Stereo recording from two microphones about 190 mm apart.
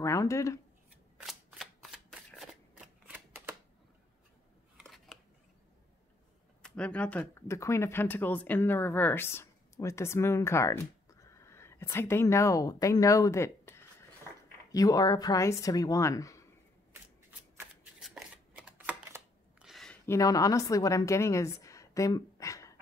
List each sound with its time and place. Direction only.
0.0 s speech: 15° left (ahead or behind)
1.2 s shuffling cards: centre (ahead or behind)
4.7 s scissors: centre (ahead or behind)
6.6 s speech: 5° left (ahead or behind)
17.9 s shuffling cards: 5° right (ahead or behind)
19.6 s a sound: centre (ahead or behind)
20.1 s a woman's voice: 15° left (ahead or behind)